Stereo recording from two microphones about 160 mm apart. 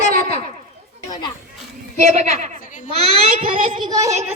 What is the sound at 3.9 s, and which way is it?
Speech, 20° right (ahead or behind).